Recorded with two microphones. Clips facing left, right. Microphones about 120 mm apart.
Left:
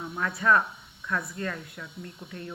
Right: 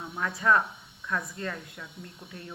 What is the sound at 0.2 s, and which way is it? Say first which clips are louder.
A woman's voice: left 1 dB; 20° right (ahead or behind).